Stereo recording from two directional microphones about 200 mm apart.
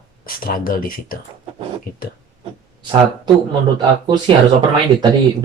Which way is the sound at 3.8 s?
20° right (ahead or behind).